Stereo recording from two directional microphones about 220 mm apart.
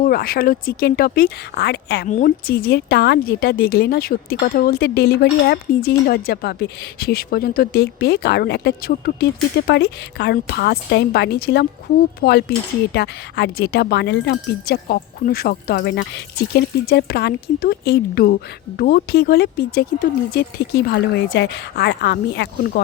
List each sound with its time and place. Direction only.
0.0 s speech: 40° left (ahead or behind)
2.0 s speech: 35° left (ahead or behind)